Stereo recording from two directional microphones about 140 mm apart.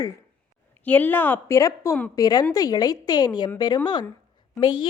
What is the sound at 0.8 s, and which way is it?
A woman's voice, 10° left (ahead or behind).